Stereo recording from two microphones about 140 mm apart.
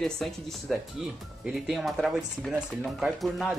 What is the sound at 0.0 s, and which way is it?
Speech, centre (ahead or behind).